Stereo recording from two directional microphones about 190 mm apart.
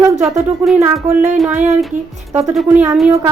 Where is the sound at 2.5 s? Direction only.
5° right (ahead or behind).